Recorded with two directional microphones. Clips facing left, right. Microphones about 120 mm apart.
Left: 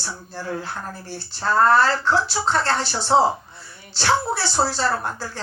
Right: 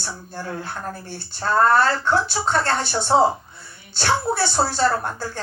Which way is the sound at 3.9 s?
50° right (ahead or behind).